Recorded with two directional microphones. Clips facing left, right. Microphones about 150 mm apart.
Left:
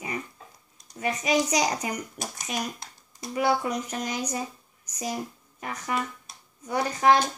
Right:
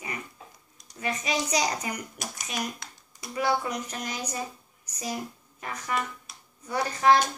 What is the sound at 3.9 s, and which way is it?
Speech, 40° left (ahead or behind).